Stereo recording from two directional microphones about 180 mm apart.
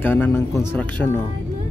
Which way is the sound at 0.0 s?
10° left (ahead or behind).